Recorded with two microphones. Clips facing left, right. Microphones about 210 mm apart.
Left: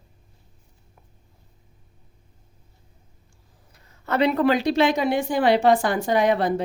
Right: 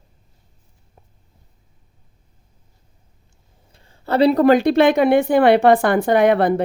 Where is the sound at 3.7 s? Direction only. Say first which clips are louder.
Right 5 dB; 30° right (ahead or behind); by 6.6 s 60° right (ahead or behind).